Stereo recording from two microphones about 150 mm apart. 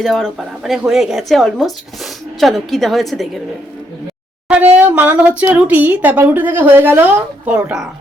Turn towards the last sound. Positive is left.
turn(degrees=-10)  # may be behind; listen again after turning